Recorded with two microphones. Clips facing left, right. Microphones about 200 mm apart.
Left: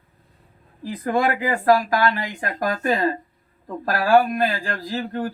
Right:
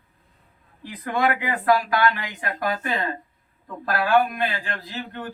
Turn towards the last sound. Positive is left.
turn(degrees=35)  # may be behind; listen again after turning